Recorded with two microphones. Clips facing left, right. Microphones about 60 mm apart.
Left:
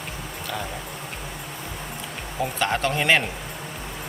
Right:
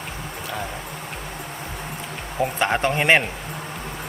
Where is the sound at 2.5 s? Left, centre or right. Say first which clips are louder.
Right 2 dB; right.